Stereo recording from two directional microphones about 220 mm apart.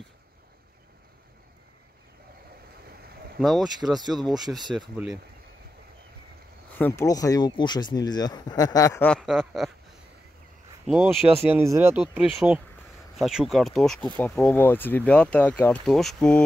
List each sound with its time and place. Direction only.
3.3 s speech: centre (ahead or behind)
6.8 s speech: 10° left (ahead or behind)
9.1 s speech: centre (ahead or behind)
10.9 s speech: 5° right (ahead or behind)